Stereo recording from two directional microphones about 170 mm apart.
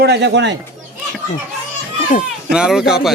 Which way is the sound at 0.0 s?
85° right.